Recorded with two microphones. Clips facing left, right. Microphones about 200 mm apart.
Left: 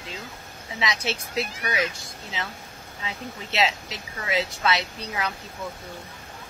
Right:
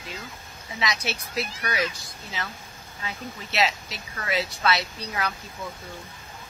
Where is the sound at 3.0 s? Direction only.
20° left (ahead or behind).